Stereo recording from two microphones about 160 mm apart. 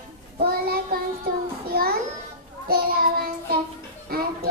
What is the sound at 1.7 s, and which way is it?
Music, 70° right (ahead or behind).